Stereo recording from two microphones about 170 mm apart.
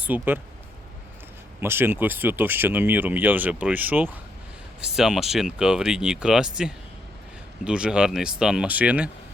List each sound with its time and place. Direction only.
0.0 s speech: 10° right (ahead or behind)
1.6 s speech: 15° right (ahead or behind)